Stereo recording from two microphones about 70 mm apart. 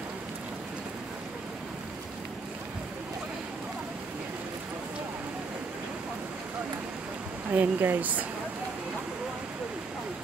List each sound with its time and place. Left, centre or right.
7.5 s speech: right